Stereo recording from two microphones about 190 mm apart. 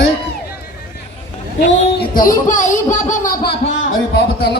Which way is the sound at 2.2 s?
45° left (ahead or behind).